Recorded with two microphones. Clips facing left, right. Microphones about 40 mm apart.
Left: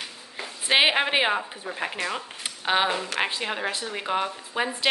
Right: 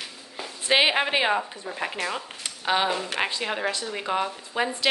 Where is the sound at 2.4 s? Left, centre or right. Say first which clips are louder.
Left 1 dB; centre.